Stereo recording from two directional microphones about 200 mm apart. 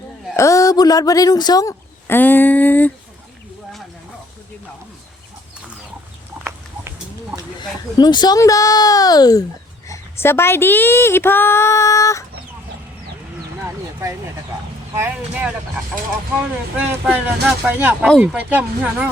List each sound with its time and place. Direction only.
0.3 s speech: 15° left (ahead or behind)
7.9 s speech: 20° left (ahead or behind)
14.9 s speech: 10° right (ahead or behind)
16.7 s speech: 5° right (ahead or behind)